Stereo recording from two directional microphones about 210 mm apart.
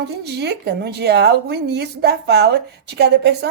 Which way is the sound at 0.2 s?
50° right (ahead or behind).